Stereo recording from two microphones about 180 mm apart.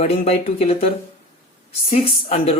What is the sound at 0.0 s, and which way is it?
Speech, 35° left (ahead or behind).